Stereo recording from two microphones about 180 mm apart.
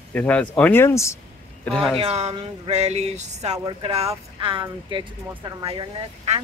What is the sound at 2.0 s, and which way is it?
Speech, 35° right (ahead or behind).